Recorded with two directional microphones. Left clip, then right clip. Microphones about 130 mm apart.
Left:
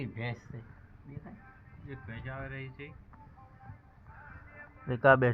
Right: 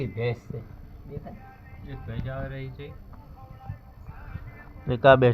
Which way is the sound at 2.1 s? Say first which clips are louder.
Right 7 dB; 15° left (ahead or behind).